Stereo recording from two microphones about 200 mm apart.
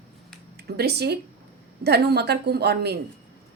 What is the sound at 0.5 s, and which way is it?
A woman's voice, 55° right (ahead or behind).